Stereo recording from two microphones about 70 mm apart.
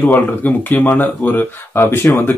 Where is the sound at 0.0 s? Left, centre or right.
Left.